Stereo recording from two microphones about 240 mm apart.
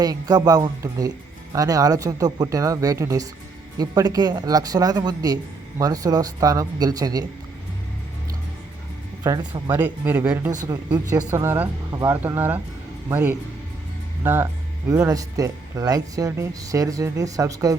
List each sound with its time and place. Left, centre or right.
0.0 s speech: centre
9.2 s speech: centre